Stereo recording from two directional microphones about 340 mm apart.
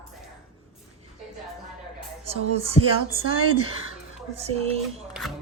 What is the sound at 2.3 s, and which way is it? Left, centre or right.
A woman's voice, centre.